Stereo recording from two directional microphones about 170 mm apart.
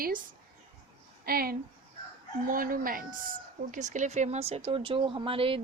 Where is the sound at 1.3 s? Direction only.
60° right (ahead or behind).